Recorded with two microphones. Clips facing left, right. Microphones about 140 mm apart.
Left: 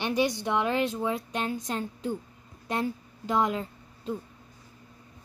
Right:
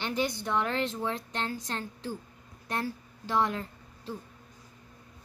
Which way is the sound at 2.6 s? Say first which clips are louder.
Left 4 dB; 15° left (ahead or behind).